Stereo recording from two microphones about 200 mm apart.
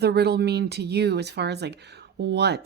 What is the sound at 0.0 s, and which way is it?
Speech, 55° right (ahead or behind).